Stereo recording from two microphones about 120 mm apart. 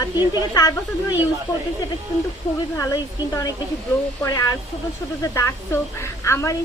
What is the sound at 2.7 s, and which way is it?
Speech, 30° left (ahead or behind).